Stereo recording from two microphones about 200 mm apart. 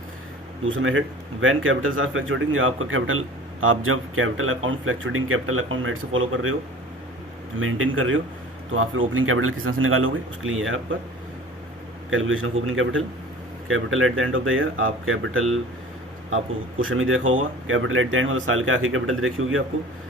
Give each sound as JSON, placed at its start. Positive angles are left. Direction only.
{"t": 0.6, "sound": "a man's voice", "side_deg": -80}
{"t": 7.6, "sound": "a man's voice", "side_deg": -90}
{"t": 12.1, "sound": "a man's voice", "side_deg": -80}